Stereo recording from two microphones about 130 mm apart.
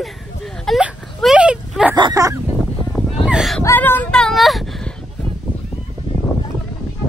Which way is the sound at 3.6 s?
20° left (ahead or behind).